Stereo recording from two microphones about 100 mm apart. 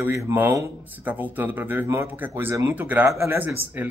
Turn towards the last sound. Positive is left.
turn(degrees=-30)  # may be behind; listen again after turning